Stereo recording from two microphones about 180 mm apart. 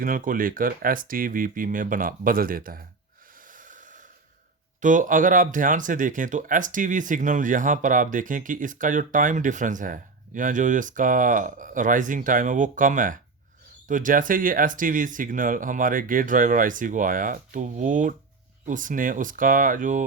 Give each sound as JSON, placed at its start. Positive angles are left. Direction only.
{"t": 0.0, "sound": "speech", "side_deg": -50}
{"t": 3.5, "sound": "snort", "side_deg": -45}
{"t": 4.8, "sound": "speech", "side_deg": -45}